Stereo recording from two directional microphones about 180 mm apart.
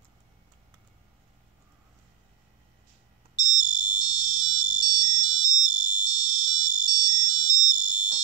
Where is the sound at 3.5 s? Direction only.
25° left (ahead or behind).